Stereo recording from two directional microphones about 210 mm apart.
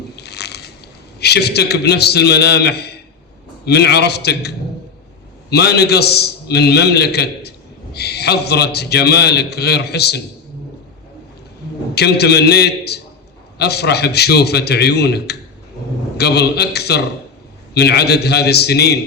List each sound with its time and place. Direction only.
0.2 s biting: 50° left (ahead or behind)
1.2 s a man's voice: 50° left (ahead or behind)
11.9 s a man's voice: 50° left (ahead or behind)